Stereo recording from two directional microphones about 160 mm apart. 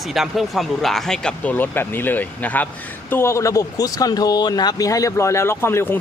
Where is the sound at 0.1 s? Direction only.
Centre (ahead or behind).